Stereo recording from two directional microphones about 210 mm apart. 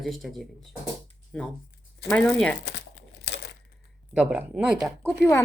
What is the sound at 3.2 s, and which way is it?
Crumpling, 55° left (ahead or behind).